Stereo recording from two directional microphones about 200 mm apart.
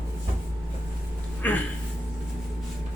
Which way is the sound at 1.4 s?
10° left (ahead or behind).